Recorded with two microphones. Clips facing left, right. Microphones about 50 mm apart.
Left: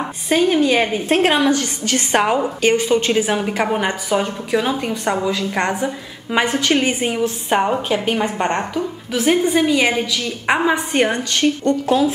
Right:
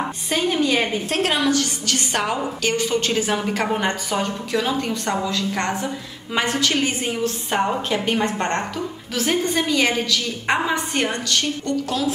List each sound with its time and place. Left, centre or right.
0.3 s a woman's voice: centre
1.0 s a woman's voice: left